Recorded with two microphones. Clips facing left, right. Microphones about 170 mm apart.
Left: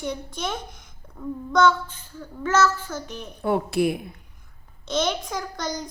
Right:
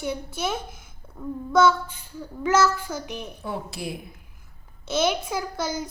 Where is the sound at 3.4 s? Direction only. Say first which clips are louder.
Left 12 dB; 60° left (ahead or behind).